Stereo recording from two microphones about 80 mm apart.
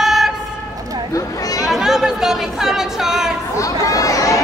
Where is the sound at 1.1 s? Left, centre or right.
Left.